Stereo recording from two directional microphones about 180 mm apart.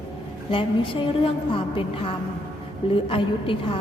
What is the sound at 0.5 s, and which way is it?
A woman's voice, 30° left (ahead or behind).